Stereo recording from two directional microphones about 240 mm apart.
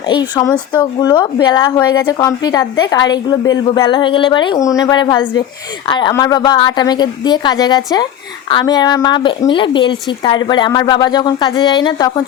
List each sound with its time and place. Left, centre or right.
0.1 s a woman's voice: centre